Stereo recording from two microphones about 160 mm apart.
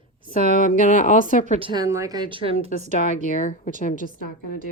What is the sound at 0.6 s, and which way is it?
Speech, 55° left (ahead or behind).